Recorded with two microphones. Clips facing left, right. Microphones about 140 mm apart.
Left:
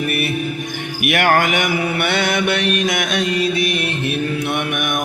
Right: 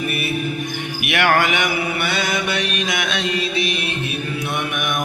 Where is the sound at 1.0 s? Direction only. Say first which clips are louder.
Left 2 dB; 45° left (ahead or behind).